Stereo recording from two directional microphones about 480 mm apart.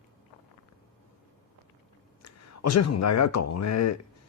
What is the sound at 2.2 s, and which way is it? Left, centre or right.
A man's voice, left.